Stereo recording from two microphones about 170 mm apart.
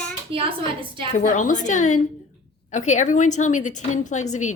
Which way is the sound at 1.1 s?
50° left (ahead or behind).